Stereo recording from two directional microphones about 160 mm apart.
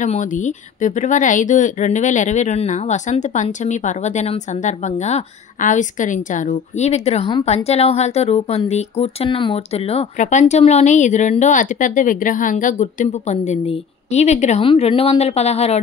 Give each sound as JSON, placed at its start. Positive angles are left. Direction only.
{"t": 0.0, "sound": "speech", "side_deg": 50}
{"t": 14.6, "sound": "speech", "side_deg": 35}